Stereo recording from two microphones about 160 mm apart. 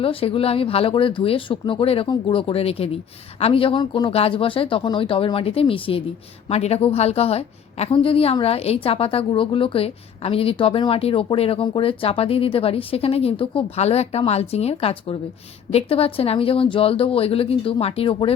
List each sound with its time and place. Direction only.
0.0 s a woman's voice: 35° left (ahead or behind)